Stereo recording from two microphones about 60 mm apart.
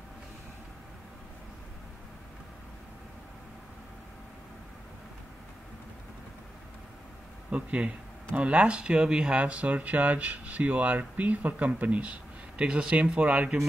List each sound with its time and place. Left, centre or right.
7.5 s speech: centre